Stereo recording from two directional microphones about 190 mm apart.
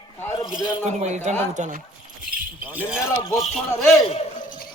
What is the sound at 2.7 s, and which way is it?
Speech, 10° right (ahead or behind).